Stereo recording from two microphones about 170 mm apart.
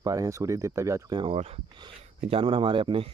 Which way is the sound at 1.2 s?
35° right (ahead or behind).